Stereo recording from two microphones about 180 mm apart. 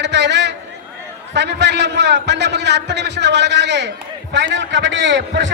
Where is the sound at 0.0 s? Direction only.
75° right (ahead or behind).